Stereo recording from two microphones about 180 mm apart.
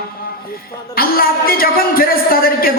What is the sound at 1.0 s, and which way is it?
Music, 55° left (ahead or behind).